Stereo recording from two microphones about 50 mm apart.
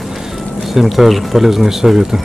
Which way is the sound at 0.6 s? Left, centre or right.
Centre.